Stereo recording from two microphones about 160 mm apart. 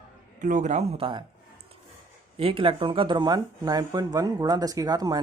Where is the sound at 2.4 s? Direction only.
35° right (ahead or behind).